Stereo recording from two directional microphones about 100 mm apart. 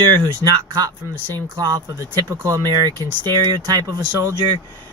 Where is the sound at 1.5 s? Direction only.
40° right (ahead or behind).